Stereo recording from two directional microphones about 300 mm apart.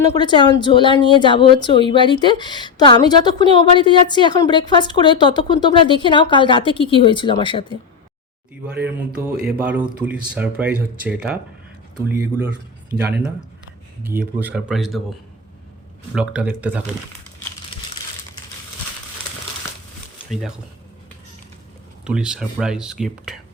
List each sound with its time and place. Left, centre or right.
0.0 s a woman's voice: centre
8.6 s speech: centre
16.1 s speech: centre
22.0 s speech: centre